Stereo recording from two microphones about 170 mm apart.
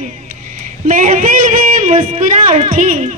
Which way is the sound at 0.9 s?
45° right (ahead or behind).